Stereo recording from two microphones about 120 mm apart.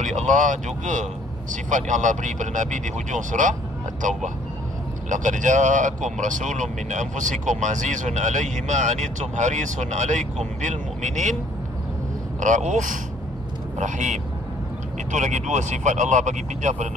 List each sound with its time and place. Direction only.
0.0 s speech: 90° right
12.4 s speech: 90° right